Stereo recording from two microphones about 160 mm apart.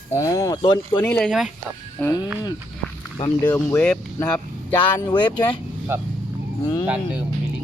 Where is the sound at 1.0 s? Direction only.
10° left (ahead or behind).